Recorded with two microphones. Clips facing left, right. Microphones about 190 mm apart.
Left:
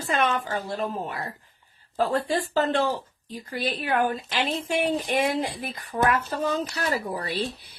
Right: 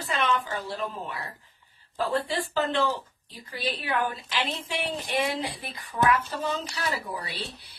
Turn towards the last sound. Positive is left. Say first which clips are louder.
# left 8 dB
turn(degrees=45)  # may be behind; listen again after turning